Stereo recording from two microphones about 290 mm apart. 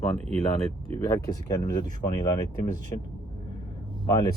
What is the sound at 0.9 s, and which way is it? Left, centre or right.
Speech, centre.